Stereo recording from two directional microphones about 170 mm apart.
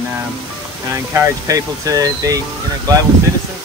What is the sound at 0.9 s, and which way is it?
Speech, 20° right (ahead or behind).